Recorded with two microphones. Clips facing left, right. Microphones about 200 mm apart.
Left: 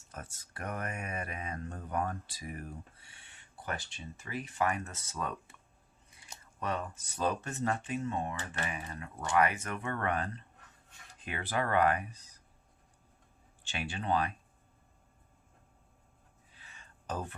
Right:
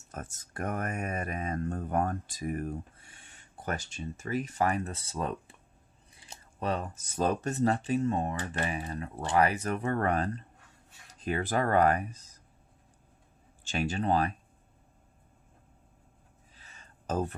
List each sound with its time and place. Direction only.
0.1 s speech: 45° right (ahead or behind)
13.7 s speech: 40° right (ahead or behind)
16.6 s a sound: 40° right (ahead or behind)